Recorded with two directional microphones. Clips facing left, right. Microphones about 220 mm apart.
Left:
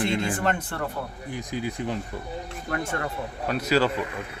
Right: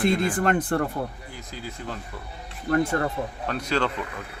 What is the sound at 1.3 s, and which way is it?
Speech, 15° left (ahead or behind).